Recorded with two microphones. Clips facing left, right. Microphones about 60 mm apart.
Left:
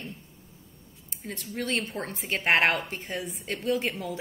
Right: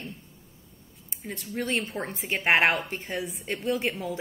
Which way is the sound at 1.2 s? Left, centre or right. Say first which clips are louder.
Right 1 dB; centre.